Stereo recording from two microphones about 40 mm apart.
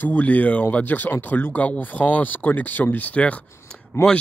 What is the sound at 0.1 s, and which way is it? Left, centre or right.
Speech, left.